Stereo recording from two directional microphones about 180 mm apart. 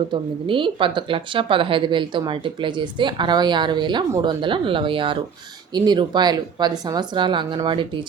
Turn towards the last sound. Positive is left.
turn(degrees=-25)  # may be behind; listen again after turning